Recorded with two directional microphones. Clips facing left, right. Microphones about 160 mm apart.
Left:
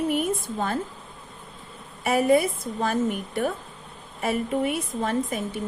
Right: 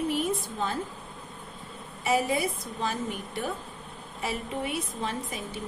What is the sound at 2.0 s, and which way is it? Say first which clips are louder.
A woman's voice: left 6 dB; 55° left (ahead or behind).